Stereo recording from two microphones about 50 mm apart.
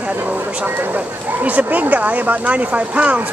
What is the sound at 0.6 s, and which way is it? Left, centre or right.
Speech, right.